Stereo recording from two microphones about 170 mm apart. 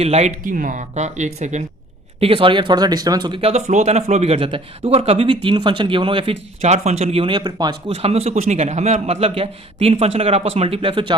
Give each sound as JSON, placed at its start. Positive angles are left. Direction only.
{"t": 0.0, "sound": "speech", "side_deg": -40}
{"t": 2.2, "sound": "speech", "side_deg": -30}
{"t": 7.9, "sound": "speech", "side_deg": -35}